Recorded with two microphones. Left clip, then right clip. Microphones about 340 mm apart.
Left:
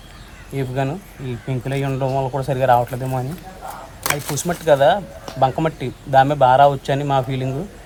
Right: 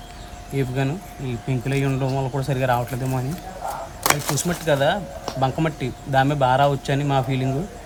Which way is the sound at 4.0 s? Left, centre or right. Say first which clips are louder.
Right 2 dB; right.